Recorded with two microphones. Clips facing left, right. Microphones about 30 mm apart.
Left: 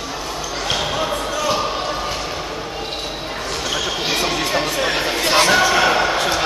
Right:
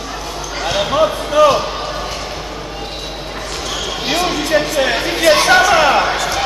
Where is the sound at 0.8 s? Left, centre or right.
Centre.